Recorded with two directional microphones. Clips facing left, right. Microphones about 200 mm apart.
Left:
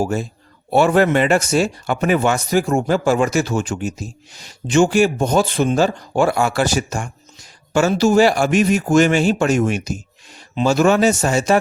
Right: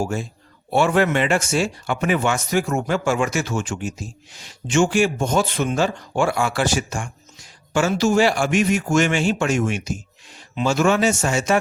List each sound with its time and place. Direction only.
0.0 s speech: 40° left (ahead or behind)